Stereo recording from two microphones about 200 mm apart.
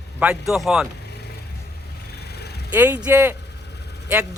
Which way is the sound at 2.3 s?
55° left (ahead or behind).